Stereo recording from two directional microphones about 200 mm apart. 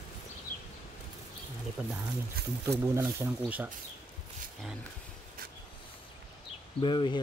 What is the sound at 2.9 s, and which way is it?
Speech, 10° right (ahead or behind).